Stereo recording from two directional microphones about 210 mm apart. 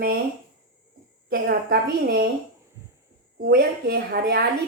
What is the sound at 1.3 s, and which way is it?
Speech, 45° right (ahead or behind).